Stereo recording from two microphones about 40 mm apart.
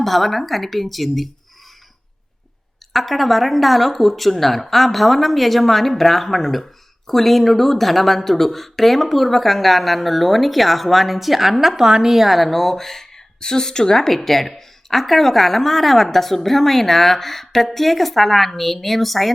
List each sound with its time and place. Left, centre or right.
0.0 s speech: centre
2.9 s a woman's voice: centre